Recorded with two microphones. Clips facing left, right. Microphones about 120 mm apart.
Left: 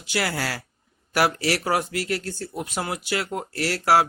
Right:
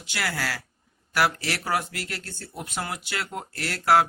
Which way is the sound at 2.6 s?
15° left (ahead or behind).